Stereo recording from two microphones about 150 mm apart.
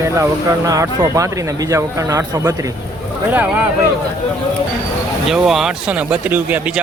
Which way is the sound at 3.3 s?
10° right (ahead or behind).